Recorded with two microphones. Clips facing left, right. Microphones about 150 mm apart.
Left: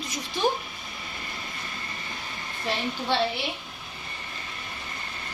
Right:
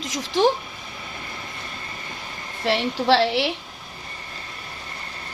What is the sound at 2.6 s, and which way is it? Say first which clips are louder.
Speech: right 8 dB; 90° right.